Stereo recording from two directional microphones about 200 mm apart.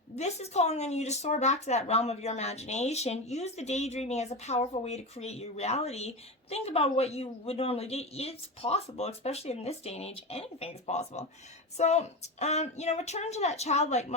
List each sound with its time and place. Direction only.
0.2 s speech: 35° left (ahead or behind)